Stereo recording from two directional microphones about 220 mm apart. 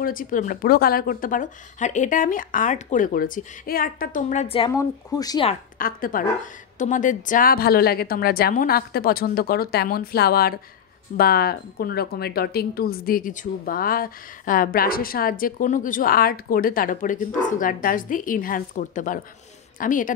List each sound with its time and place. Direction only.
0.0 s a woman's voice: 40° left (ahead or behind); by 5.5 s 15° left (ahead or behind)
5.5 s a woman's voice: 40° left (ahead or behind)